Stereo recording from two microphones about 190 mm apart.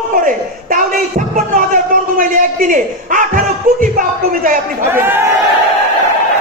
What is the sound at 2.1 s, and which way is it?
A man's voice, 45° right (ahead or behind).